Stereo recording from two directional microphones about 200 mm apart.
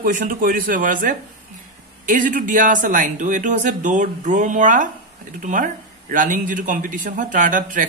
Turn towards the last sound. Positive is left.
turn(degrees=-40)  # may be behind; listen again after turning